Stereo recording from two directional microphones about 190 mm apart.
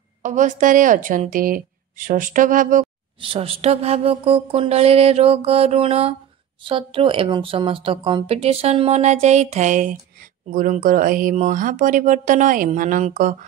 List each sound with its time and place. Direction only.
0.2 s speech: 40° right (ahead or behind)
3.2 s a sound: 30° right (ahead or behind)
6.6 s speech: 25° right (ahead or behind); by 13.5 s 40° right (ahead or behind)